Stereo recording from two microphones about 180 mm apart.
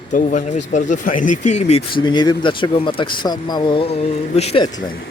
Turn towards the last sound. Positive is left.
turn(degrees=25)  # may be behind; listen again after turning